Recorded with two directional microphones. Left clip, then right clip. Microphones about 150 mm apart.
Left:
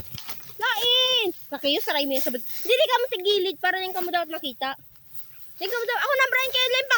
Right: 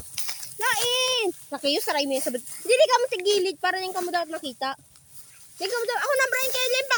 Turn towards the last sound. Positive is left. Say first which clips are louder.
# left 2 dB
turn(degrees=10)  # may be behind; listen again after turning